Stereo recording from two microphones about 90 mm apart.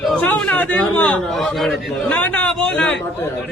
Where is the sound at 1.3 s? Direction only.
Centre (ahead or behind).